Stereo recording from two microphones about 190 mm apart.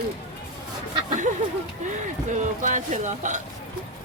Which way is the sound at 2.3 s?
40° right (ahead or behind).